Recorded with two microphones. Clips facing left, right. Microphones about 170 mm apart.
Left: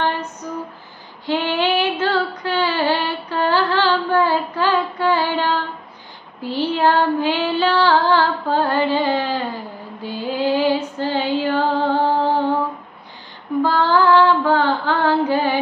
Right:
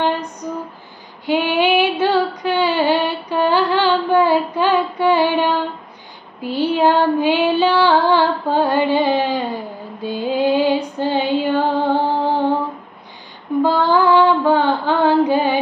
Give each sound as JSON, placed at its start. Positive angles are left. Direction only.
{"t": 1.2, "sound": "female singing", "side_deg": -15}
{"t": 13.6, "sound": "female singing", "side_deg": -15}